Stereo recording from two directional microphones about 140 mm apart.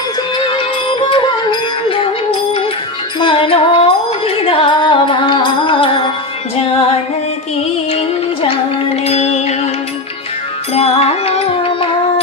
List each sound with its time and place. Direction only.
0.3 s music: 35° left (ahead or behind)
3.2 s music: 35° left (ahead or behind)
7.9 s music: 40° left (ahead or behind)
10.8 s music: 50° left (ahead or behind)